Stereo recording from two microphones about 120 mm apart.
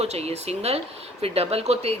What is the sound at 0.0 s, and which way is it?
Speech, 60° right (ahead or behind).